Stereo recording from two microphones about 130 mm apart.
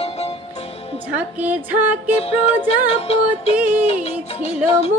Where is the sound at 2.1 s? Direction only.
55° left (ahead or behind).